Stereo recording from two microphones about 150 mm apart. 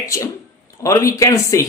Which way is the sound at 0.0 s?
20° left (ahead or behind).